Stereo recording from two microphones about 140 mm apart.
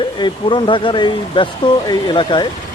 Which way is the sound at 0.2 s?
35° left (ahead or behind).